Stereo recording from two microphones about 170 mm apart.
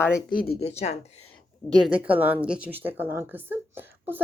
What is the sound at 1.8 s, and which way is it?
A woman's voice, 5° right (ahead or behind).